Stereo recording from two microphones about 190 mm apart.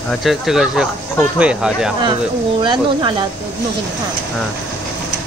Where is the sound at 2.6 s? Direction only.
25° right (ahead or behind).